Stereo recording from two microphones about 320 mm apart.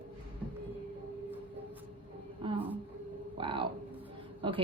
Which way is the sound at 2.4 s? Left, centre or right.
Centre.